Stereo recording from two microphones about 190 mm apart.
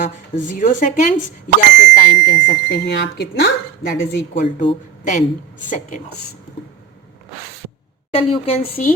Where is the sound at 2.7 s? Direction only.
60° left (ahead or behind).